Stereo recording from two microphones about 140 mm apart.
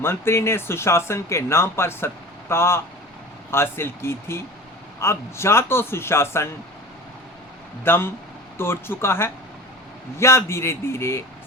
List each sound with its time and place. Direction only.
0.0 s a man's voice: 20° left (ahead or behind)
7.9 s a man's voice: 15° left (ahead or behind)